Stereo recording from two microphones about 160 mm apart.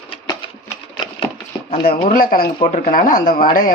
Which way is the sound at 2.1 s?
65° left (ahead or behind).